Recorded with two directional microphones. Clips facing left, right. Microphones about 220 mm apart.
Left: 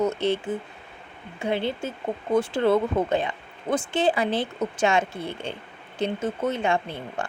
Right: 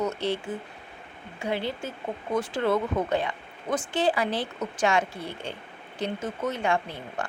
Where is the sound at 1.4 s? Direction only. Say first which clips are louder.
Left 3 dB; 25° left (ahead or behind).